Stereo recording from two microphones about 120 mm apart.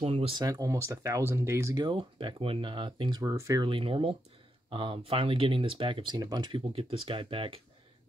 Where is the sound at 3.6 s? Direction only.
50° right (ahead or behind).